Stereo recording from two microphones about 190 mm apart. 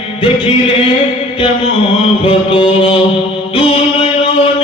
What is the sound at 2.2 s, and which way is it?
Mantra, 25° left (ahead or behind).